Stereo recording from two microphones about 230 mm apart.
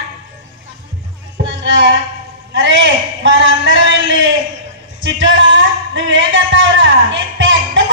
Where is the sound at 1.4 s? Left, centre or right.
Right.